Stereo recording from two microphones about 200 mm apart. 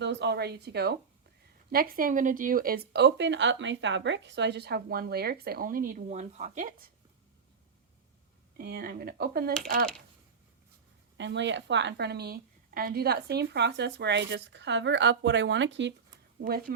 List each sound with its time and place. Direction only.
0.0 s a woman's voice: 60° right (ahead or behind); by 6.7 s 40° right (ahead or behind)
8.5 s a woman's voice: 50° right (ahead or behind)
11.2 s a woman's voice: 65° right (ahead or behind)
16.4 s a woman's voice: 45° right (ahead or behind)